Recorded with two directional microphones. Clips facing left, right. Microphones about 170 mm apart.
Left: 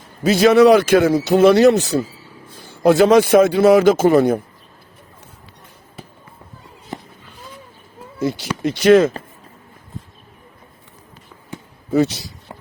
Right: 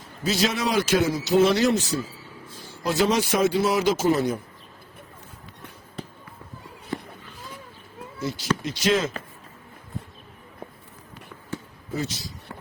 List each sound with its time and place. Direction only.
0.2 s a man's voice: 60° left (ahead or behind)
8.2 s a man's voice: 55° left (ahead or behind)